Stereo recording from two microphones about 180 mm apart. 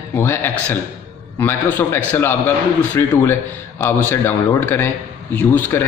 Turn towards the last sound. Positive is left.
turn(degrees=10)  # may be behind; listen again after turning